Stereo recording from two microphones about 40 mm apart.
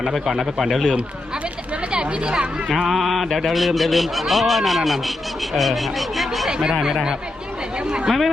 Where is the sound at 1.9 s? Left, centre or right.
Right.